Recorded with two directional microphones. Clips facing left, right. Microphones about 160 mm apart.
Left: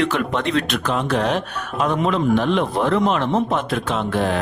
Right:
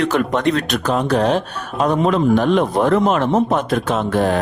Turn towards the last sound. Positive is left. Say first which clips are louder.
# right 4 dB
turn(degrees=-40)  # may be behind; listen again after turning